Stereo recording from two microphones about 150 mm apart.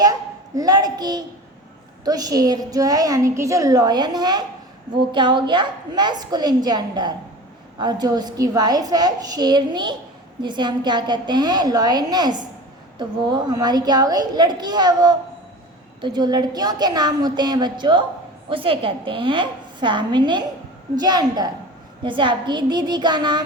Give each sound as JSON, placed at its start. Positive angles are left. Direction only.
{"t": 0.0, "sound": "a child's voice", "side_deg": -25}